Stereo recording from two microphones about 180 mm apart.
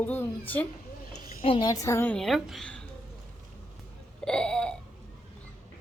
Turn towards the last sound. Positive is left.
turn(degrees=5)  # may be behind; listen again after turning